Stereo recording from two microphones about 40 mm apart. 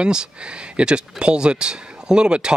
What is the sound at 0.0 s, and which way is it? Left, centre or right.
Speech, right.